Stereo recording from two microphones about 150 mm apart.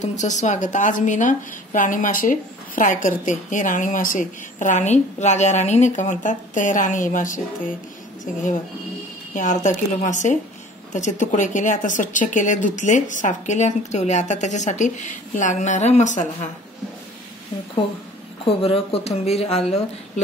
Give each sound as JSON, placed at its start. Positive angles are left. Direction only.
{"t": 0.0, "sound": "a woman's voice", "side_deg": 50}
{"t": 9.3, "sound": "a woman's voice", "side_deg": 55}
{"t": 18.4, "sound": "speech", "side_deg": 40}